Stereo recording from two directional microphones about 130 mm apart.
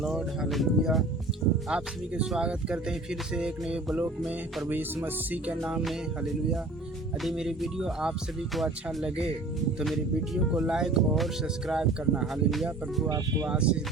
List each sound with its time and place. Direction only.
0.0 s speech: 5° right (ahead or behind)
5.0 s speech: 15° right (ahead or behind)
5.5 s speech: centre (ahead or behind)
7.2 s speech: centre (ahead or behind)
13.1 s speech: 25° right (ahead or behind)
13.5 s speech: 10° right (ahead or behind)